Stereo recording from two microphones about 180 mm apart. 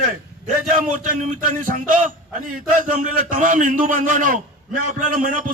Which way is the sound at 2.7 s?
45° right (ahead or behind).